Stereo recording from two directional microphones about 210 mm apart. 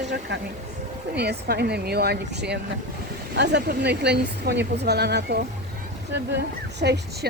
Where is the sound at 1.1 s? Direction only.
50° right (ahead or behind).